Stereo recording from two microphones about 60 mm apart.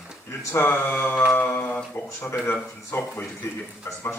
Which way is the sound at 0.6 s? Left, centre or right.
Left.